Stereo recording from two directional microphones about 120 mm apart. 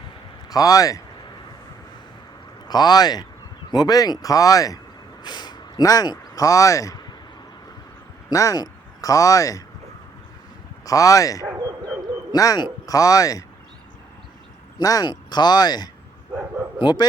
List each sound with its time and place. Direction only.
0.5 s speech: 30° left (ahead or behind)
2.6 s speech: 35° left (ahead or behind)
8.3 s speech: 30° left (ahead or behind)
10.8 s speech: 30° left (ahead or behind)
14.8 s a man's voice: 30° left (ahead or behind)